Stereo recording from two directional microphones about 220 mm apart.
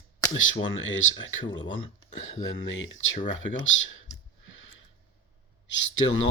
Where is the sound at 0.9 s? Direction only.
60° left (ahead or behind).